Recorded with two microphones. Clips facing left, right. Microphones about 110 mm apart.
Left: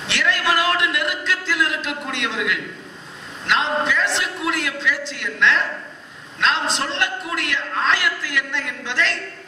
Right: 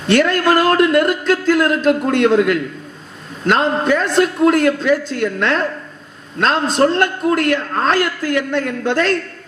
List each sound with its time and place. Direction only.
0.0 s a man's voice: 45° right (ahead or behind)